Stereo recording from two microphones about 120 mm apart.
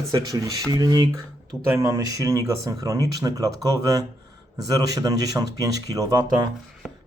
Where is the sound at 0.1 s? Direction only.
30° right (ahead or behind).